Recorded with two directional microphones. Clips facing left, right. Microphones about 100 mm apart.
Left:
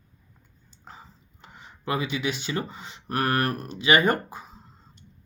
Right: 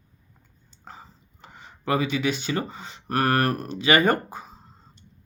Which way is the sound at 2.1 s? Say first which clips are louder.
Right 3 dB; 35° right (ahead or behind).